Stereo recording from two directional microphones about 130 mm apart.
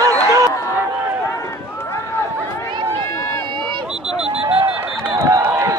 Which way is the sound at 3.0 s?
20° left (ahead or behind).